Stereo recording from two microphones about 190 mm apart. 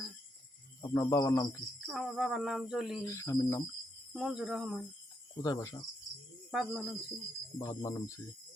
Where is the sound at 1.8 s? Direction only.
Centre (ahead or behind).